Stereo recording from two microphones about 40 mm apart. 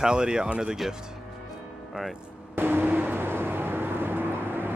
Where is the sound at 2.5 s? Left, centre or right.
Right.